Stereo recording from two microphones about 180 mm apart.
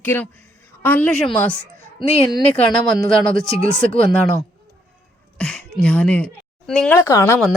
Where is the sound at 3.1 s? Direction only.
5° left (ahead or behind).